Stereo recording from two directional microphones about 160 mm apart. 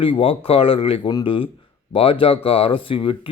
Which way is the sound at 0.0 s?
35° left (ahead or behind).